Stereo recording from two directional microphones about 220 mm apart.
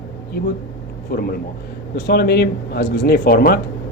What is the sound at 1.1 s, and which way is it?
Speech, 45° left (ahead or behind).